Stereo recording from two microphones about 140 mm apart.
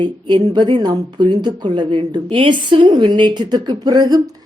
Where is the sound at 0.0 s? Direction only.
35° right (ahead or behind).